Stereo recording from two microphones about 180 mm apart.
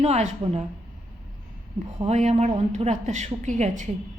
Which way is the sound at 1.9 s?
40° right (ahead or behind).